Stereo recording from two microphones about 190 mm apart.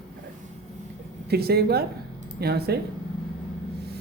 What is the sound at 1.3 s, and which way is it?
Speech, 55° right (ahead or behind).